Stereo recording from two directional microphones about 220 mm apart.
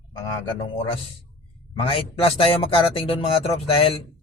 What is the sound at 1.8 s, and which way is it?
A man's voice, 25° left (ahead or behind).